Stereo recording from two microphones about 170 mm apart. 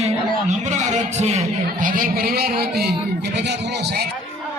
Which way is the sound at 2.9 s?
80° right.